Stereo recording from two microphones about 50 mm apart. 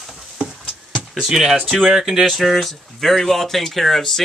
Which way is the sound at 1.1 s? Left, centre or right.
Centre.